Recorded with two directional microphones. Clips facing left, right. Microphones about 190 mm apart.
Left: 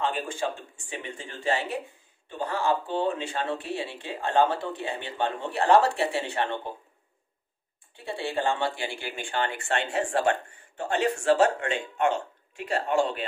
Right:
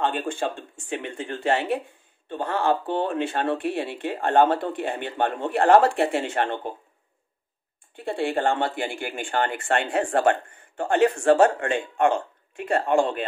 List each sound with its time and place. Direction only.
0.0 s speech: 60° right (ahead or behind)
8.1 s speech: 50° right (ahead or behind)